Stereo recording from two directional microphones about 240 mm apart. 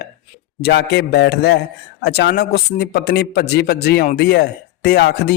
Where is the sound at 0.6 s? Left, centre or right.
Left.